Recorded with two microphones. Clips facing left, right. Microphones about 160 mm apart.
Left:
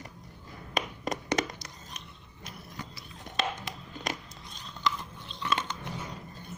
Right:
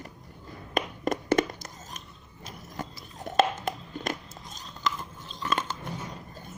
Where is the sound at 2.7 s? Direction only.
45° right (ahead or behind).